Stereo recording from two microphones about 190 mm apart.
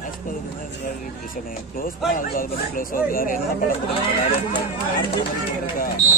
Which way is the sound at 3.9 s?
25° left (ahead or behind).